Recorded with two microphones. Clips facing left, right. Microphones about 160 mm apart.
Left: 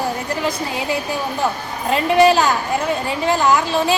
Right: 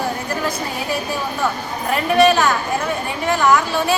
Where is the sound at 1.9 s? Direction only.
25° left (ahead or behind).